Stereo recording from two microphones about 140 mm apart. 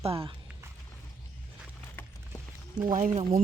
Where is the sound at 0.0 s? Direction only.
40° right (ahead or behind).